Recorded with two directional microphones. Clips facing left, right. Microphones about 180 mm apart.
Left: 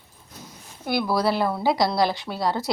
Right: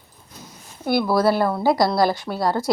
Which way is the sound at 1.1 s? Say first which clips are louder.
Right 3 dB; 50° right (ahead or behind).